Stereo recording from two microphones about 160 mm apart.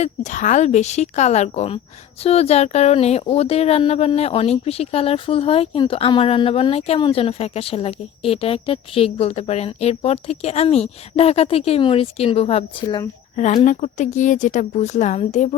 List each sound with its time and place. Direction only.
0.0 s speech: 45° left (ahead or behind)